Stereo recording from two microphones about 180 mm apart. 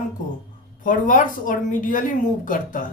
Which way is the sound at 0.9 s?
50° left (ahead or behind).